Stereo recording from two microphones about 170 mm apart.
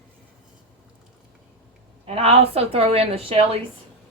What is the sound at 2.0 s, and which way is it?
A woman's voice, 35° right (ahead or behind).